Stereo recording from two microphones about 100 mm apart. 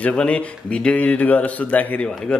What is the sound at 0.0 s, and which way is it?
Speech, 10° left (ahead or behind).